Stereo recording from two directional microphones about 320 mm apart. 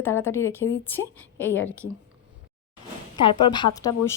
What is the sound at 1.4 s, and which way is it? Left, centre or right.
Speech, left.